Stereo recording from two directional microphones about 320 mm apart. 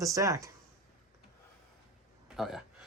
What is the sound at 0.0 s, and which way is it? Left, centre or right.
Speech, centre.